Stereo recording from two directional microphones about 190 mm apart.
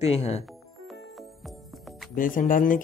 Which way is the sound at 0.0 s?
35° left (ahead or behind).